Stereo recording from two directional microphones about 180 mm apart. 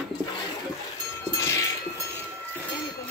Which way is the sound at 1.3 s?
15° left (ahead or behind).